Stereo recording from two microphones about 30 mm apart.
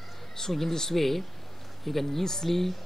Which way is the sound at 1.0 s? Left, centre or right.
Centre.